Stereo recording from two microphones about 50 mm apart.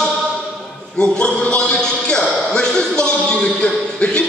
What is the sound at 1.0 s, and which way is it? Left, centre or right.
A man's voice, centre.